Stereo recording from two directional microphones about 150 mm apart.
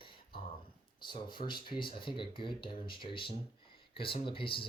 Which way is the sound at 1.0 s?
30° left (ahead or behind).